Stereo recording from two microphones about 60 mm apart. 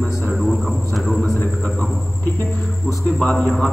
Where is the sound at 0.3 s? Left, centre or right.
Centre.